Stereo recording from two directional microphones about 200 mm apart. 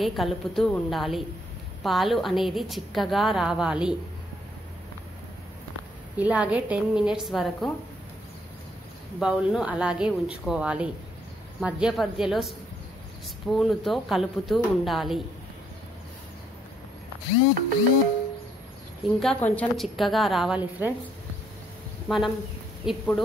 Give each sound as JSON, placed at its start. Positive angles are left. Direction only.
{"t": 0.0, "sound": "a woman's voice", "side_deg": 0}
{"t": 6.1, "sound": "a woman's voice", "side_deg": -5}
{"t": 9.2, "sound": "a woman's voice", "side_deg": -5}
{"t": 19.1, "sound": "a woman's voice", "side_deg": 5}
{"t": 22.0, "sound": "a woman's voice", "side_deg": 0}